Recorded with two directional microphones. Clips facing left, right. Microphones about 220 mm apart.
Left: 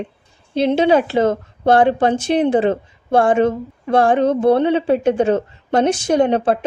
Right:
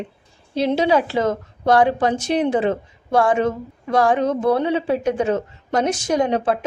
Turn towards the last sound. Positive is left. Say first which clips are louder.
# left 4 dB
turn(degrees=30)  # may be behind; listen again after turning